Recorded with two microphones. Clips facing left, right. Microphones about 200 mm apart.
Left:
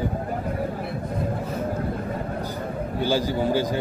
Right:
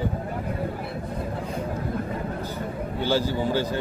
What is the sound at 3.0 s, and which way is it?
Speech, 15° left (ahead or behind).